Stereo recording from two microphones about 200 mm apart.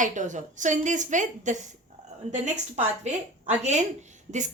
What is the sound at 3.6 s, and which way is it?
Speech, 35° right (ahead or behind).